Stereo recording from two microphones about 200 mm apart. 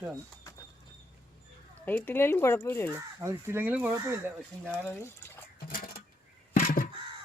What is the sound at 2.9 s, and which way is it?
Speech, 15° right (ahead or behind).